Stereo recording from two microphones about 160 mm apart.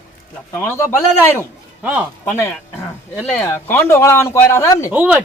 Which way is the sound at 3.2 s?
10° left (ahead or behind).